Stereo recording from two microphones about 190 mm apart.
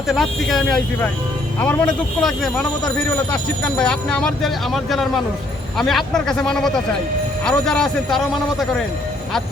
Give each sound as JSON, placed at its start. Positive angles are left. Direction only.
{"t": 0.1, "sound": "a man's voice", "side_deg": 0}
{"t": 3.8, "sound": "speech", "side_deg": 5}